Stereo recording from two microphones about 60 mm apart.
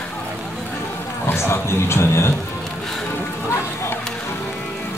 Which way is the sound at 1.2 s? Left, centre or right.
Left.